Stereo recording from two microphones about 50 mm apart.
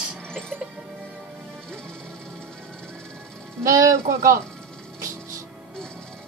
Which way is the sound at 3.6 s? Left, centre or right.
Right.